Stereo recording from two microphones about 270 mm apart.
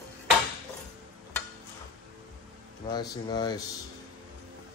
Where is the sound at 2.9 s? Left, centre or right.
Centre.